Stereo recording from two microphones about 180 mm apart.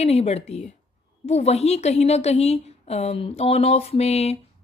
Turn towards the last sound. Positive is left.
turn(degrees=35)  # may be behind; listen again after turning